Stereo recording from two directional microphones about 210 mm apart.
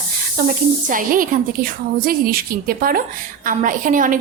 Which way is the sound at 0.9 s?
40° right (ahead or behind).